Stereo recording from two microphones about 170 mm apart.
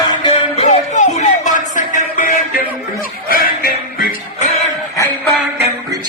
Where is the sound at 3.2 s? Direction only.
60° left (ahead or behind).